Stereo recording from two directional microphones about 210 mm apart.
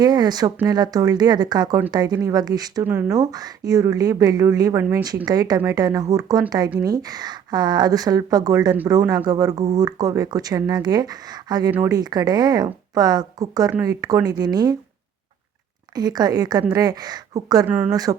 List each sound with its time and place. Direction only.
0.0 s a woman's voice: 20° right (ahead or behind)
16.0 s a woman's voice: 20° right (ahead or behind)
17.7 s speech: 10° right (ahead or behind)